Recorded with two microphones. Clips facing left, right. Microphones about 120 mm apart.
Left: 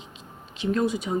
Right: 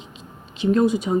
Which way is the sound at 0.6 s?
20° right (ahead or behind).